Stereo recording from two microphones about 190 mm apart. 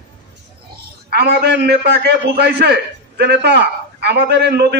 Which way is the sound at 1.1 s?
60° right (ahead or behind).